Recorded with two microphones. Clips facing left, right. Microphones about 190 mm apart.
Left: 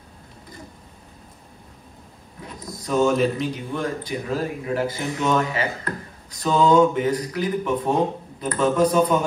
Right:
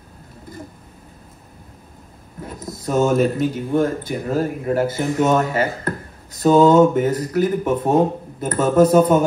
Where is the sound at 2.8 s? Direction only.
50° right (ahead or behind).